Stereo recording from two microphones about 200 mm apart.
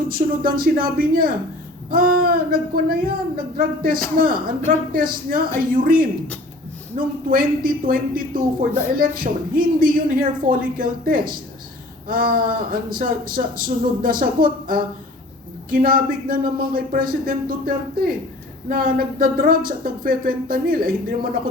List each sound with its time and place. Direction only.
0.1 s speech: 45° right (ahead or behind)